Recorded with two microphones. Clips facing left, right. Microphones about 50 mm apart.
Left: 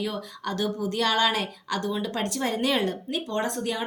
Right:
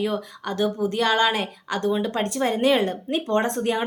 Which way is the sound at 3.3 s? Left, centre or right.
Right.